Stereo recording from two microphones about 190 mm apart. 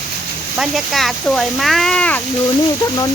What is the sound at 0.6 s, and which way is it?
Speech, centre (ahead or behind).